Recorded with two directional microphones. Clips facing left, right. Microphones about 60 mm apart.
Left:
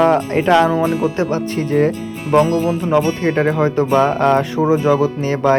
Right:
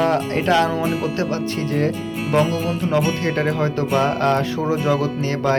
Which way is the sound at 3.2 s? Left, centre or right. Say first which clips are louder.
Left 5 dB; left.